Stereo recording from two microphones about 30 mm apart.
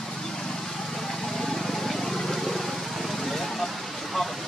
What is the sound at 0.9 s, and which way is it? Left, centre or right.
Vehicle, centre.